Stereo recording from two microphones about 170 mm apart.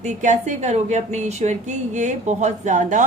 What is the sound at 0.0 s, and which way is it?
A woman's voice, 45° right (ahead or behind).